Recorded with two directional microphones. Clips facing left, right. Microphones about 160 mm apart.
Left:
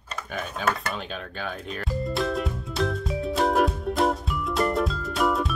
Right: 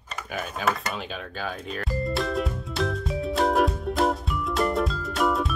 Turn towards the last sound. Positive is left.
turn(degrees=0)  # may be behind; listen again after turning